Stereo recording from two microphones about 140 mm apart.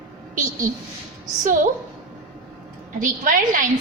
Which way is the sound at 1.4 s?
75° right (ahead or behind).